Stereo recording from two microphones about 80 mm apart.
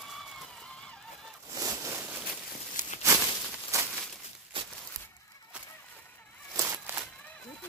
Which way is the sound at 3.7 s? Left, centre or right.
Right.